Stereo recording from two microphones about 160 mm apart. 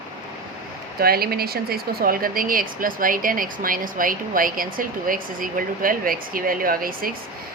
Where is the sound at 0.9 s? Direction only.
70° right (ahead or behind).